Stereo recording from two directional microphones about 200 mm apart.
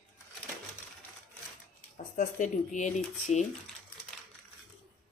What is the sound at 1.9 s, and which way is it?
Speech, 40° left (ahead or behind).